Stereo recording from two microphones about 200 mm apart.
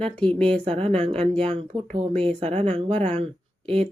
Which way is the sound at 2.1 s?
5° left (ahead or behind).